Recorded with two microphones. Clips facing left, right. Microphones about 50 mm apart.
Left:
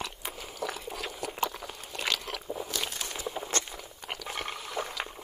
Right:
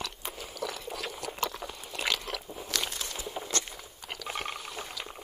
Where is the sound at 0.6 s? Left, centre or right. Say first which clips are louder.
Left 1 dB; left.